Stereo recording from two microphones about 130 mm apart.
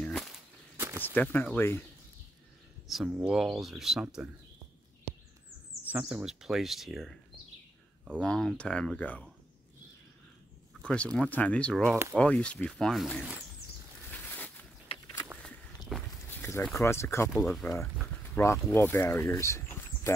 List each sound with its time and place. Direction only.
0.0 s whip: centre (ahead or behind)
0.7 s a sound: 15° right (ahead or behind)
1.0 s speech: 15° left (ahead or behind)
2.9 s speech: 5° right (ahead or behind)
5.9 s speech: 10° right (ahead or behind)
8.2 s speech: 5° left (ahead or behind)
10.8 s speech: 10° left (ahead or behind)
14.1 s boat: 10° left (ahead or behind)
15.4 s walk: centre (ahead or behind)
16.3 s a sound: 20° left (ahead or behind)
16.7 s speech: 20° left (ahead or behind)